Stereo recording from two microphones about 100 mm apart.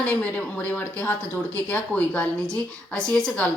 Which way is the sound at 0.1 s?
15° left (ahead or behind).